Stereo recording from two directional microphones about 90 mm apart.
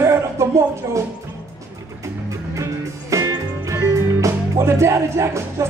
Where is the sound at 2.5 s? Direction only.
35° right (ahead or behind).